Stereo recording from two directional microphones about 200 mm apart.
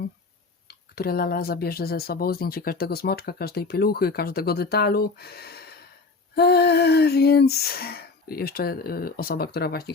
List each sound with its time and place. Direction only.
0.7 s speech: 50° left (ahead or behind)